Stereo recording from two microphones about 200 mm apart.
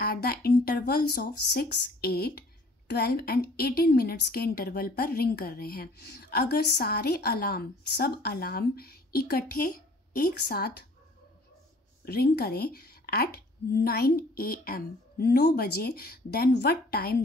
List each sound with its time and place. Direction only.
0.0 s a woman's voice: 50° left (ahead or behind)
12.0 s a woman's voice: 50° left (ahead or behind)